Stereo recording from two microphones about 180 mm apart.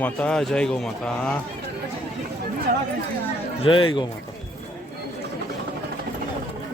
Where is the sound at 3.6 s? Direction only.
30° left (ahead or behind).